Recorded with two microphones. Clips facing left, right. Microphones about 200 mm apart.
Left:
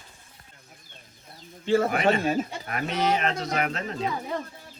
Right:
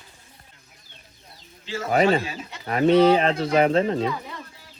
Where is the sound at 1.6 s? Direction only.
55° left (ahead or behind).